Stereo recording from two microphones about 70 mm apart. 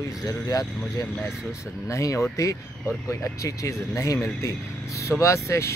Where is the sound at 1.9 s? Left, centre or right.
Left.